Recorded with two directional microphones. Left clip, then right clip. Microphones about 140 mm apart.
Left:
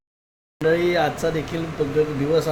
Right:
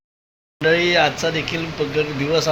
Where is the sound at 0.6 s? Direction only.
15° left (ahead or behind).